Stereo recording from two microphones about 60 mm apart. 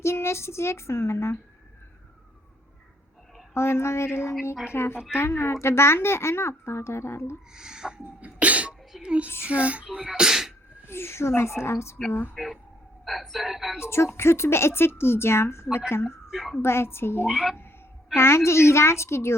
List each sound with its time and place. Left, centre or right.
0.0 s speech: left
3.5 s speech: left
7.5 s speech: centre
8.2 s cough: right
9.0 s speech: centre
9.8 s speech: centre
10.8 s speech: left
12.3 s speech: centre
13.7 s speech: left
16.3 s speech: centre
16.6 s a woman's voice: left
17.2 s speech: centre
18.1 s speech: left